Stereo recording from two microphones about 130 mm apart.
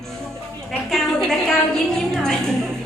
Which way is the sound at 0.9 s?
5° left (ahead or behind).